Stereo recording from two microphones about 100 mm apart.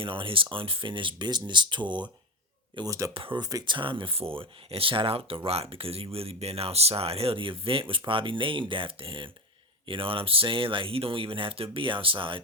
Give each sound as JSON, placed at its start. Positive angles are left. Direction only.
{"t": 0.0, "sound": "speech", "side_deg": -60}
{"t": 2.8, "sound": "speech", "side_deg": -35}
{"t": 3.1, "sound": "speech", "side_deg": -60}
{"t": 3.4, "sound": "speech", "side_deg": -45}